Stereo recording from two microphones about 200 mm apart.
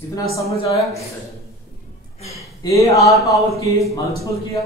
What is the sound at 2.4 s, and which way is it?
A man's voice, 15° left (ahead or behind).